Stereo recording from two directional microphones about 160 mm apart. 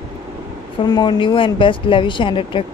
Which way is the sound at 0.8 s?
25° left (ahead or behind).